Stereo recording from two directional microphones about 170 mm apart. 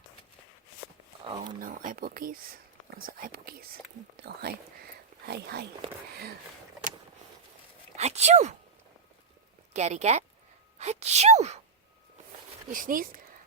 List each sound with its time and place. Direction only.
1.2 s speech: 30° right (ahead or behind)
1.5 s speech: 55° right (ahead or behind); by 5.6 s 70° right (ahead or behind)
7.9 s speech: 40° right (ahead or behind)
9.7 s speech: 40° right (ahead or behind)
12.7 s speech: 55° right (ahead or behind)